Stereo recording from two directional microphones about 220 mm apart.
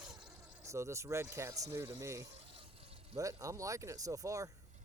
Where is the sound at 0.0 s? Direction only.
5° right (ahead or behind).